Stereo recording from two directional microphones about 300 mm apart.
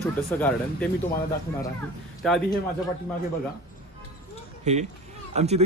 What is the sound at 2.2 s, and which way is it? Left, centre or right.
Speech, centre.